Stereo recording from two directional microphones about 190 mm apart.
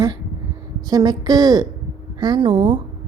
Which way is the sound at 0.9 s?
20° right (ahead or behind).